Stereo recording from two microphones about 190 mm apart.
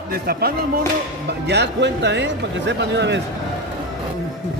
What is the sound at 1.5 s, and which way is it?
A man's voice, 65° right (ahead or behind).